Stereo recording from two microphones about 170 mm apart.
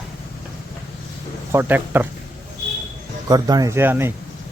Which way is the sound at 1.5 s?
10° right (ahead or behind).